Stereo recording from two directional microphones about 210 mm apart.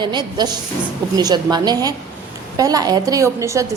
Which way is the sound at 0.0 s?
20° right (ahead or behind).